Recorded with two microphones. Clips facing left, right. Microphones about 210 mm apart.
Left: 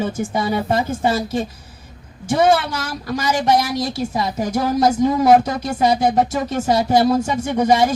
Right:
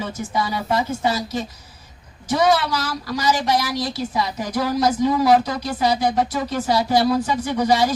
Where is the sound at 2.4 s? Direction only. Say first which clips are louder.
Left 2 dB; 50° left (ahead or behind).